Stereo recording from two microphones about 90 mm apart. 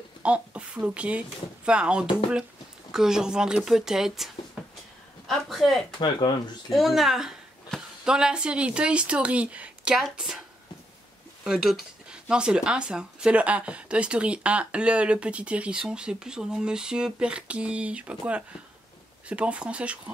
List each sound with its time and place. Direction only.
0.2 s speech: 15° right (ahead or behind); by 5.9 s centre (ahead or behind)
5.9 s speech: 60° left (ahead or behind)
6.7 s speech: centre (ahead or behind)
9.9 s speech: centre (ahead or behind)
11.4 s speech: 5° right (ahead or behind)